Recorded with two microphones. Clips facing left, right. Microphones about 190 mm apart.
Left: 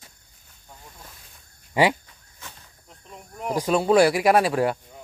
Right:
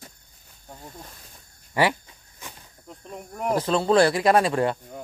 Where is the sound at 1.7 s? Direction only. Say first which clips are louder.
Left 2 dB; 15° left (ahead or behind).